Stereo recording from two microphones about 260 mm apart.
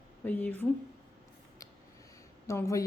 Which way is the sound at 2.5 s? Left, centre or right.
Centre.